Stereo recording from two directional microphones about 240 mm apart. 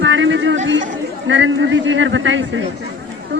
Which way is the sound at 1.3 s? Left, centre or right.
Right.